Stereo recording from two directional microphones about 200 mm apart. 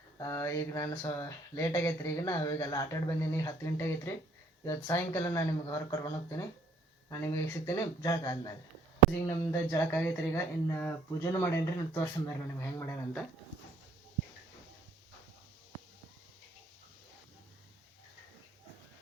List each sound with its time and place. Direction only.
0.2 s speech: 15° left (ahead or behind)